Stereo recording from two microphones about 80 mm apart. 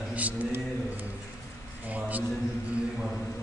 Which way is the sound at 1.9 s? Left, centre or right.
Centre.